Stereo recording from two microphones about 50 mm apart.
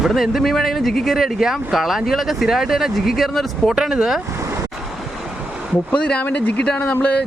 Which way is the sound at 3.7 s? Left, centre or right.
Centre.